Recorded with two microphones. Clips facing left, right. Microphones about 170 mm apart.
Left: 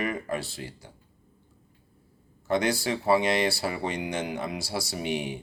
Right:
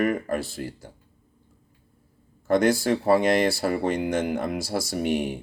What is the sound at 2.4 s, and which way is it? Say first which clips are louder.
Speech: right 5 dB; 50° right (ahead or behind).